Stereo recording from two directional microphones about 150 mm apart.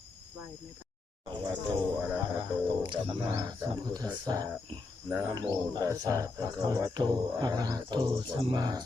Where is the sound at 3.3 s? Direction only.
25° right (ahead or behind).